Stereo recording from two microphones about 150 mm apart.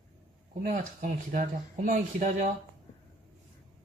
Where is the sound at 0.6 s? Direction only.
60° right (ahead or behind).